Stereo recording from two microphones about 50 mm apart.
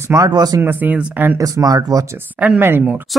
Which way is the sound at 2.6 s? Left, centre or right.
Right.